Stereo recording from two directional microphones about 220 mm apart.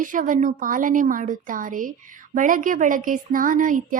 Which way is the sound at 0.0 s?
35° right (ahead or behind).